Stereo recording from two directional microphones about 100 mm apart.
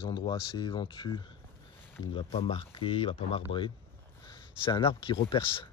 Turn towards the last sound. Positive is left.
turn(degrees=60)  # may be behind; listen again after turning